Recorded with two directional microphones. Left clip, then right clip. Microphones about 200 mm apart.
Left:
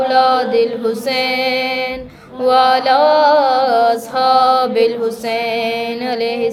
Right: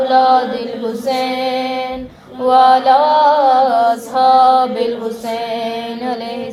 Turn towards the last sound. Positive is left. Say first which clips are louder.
# left 4 dB
turn(degrees=25)  # may be behind; listen again after turning